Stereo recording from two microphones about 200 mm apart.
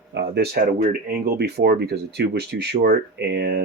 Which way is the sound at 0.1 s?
60° right (ahead or behind).